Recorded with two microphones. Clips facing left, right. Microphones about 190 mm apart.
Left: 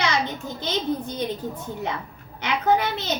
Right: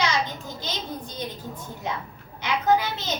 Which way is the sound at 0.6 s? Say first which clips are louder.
Left 9 dB; 60° left (ahead or behind).